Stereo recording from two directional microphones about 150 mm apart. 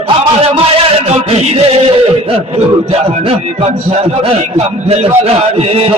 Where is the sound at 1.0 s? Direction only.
45° right (ahead or behind).